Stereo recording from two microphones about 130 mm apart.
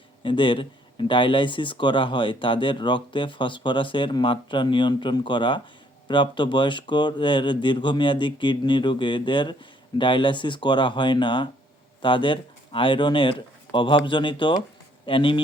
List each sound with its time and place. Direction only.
0.2 s speech: 40° left (ahead or behind)